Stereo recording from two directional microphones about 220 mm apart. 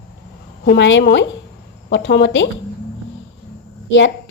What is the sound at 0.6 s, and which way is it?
A woman's voice, 55° left (ahead or behind).